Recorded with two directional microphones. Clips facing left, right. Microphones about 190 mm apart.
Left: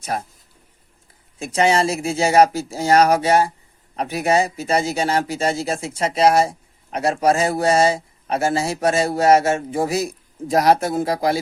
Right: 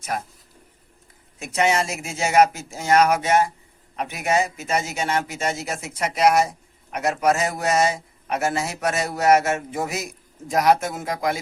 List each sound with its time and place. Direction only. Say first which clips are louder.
0.0 s a man's voice: left 3 dB; 30° left (ahead or behind)
1.4 s a man's voice: left 4 dB; 30° left (ahead or behind)